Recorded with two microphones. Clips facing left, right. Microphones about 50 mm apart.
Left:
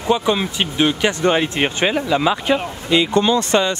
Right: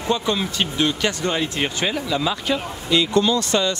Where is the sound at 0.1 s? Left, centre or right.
Centre.